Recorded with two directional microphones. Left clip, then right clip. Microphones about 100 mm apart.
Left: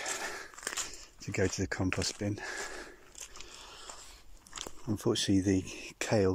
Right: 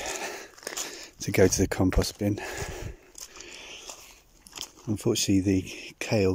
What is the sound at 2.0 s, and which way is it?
Speech, 45° right (ahead or behind).